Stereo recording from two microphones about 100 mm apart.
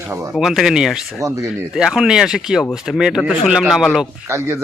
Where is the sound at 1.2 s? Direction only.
30° right (ahead or behind).